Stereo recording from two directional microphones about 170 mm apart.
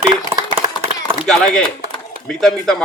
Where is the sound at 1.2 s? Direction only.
5° left (ahead or behind).